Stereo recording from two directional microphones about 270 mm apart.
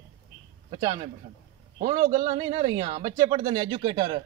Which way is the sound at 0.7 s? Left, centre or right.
Centre.